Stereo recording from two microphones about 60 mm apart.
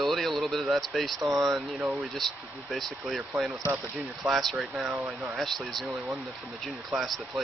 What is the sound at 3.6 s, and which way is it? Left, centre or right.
Speech, right.